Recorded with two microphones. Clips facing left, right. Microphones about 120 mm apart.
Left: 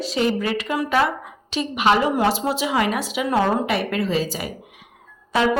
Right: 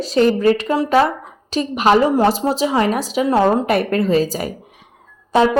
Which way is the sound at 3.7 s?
50° right (ahead or behind).